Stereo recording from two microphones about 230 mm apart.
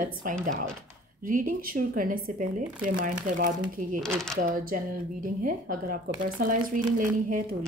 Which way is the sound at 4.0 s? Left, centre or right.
Centre.